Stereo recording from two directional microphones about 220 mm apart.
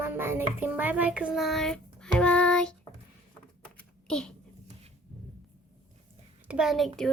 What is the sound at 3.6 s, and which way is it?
Typing, 5° left (ahead or behind).